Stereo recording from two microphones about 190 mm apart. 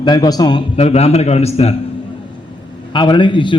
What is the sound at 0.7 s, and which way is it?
A man's voice, 30° left (ahead or behind).